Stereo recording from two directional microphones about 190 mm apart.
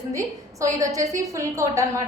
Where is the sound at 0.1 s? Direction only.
15° right (ahead or behind).